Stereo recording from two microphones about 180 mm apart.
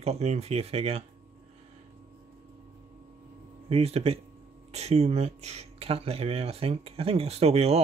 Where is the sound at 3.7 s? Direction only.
35° right (ahead or behind).